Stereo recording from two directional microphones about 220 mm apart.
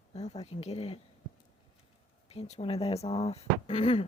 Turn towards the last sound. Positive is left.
turn(degrees=30)  # may be behind; listen again after turning